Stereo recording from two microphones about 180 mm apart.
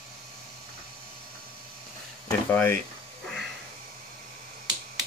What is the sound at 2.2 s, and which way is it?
Speech, 10° left (ahead or behind).